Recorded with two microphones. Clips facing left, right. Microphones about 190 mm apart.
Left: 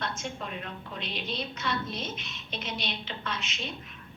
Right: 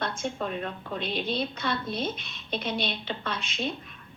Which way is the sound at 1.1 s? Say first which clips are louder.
Right 6 dB; 55° right (ahead or behind).